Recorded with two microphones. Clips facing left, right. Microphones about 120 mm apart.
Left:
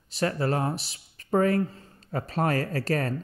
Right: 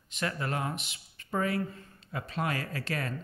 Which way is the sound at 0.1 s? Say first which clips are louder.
Left 7 dB; 35° left (ahead or behind).